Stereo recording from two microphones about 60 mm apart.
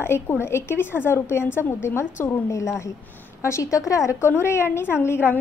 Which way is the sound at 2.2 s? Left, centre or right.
Left.